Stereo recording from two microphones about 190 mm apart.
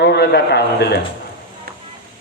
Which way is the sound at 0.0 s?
60° left (ahead or behind).